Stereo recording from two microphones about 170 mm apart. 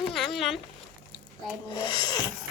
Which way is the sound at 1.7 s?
25° left (ahead or behind).